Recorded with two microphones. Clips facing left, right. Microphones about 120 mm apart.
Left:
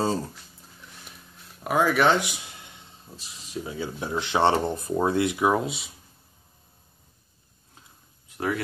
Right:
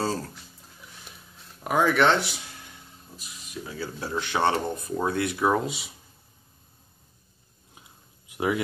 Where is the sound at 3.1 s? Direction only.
30° left (ahead or behind).